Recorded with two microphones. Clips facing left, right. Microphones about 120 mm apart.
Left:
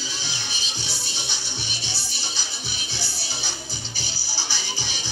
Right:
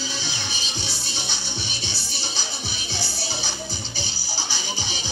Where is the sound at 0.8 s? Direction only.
20° right (ahead or behind).